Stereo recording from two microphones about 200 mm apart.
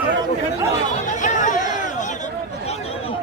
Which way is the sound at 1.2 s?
40° left (ahead or behind).